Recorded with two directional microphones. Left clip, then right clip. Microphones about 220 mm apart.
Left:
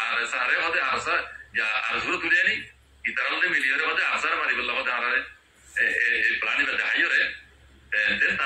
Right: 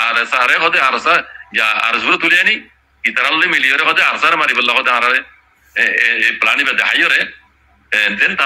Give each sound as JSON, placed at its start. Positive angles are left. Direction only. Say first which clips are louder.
{"t": 0.0, "sound": "speech", "louder": "right 12 dB", "side_deg": -50}